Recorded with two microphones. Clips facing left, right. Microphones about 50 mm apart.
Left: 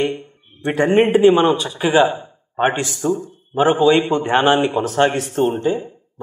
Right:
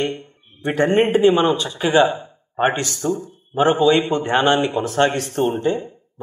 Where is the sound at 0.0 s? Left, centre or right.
Centre.